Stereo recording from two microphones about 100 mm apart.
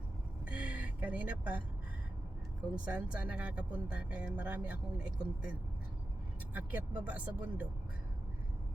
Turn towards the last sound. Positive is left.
turn(degrees=-15)  # may be behind; listen again after turning